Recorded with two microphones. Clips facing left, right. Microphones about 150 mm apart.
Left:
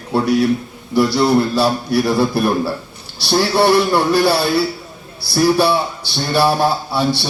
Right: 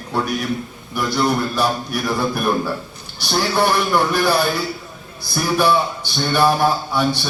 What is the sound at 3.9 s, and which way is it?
A man's voice, 30° left (ahead or behind).